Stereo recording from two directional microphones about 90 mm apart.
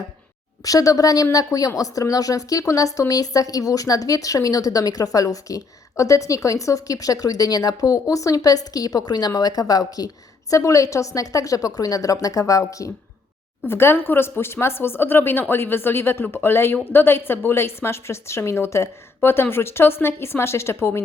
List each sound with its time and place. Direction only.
0.6 s a woman's voice: 40° left (ahead or behind)
13.7 s speech: 25° left (ahead or behind)